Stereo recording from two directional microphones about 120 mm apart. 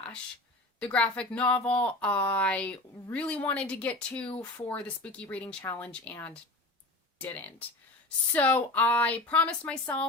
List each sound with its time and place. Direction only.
0.8 s speech: 10° left (ahead or behind)